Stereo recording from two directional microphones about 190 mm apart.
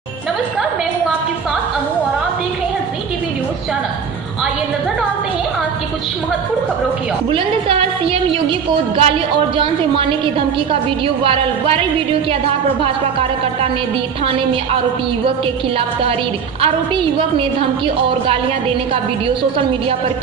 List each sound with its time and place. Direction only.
7.2 s a woman's voice: 30° right (ahead or behind)
11.2 s a woman's voice: 30° right (ahead or behind)
16.6 s a woman's voice: 30° right (ahead or behind)